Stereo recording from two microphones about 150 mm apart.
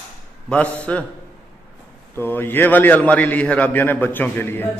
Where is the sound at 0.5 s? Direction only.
10° left (ahead or behind).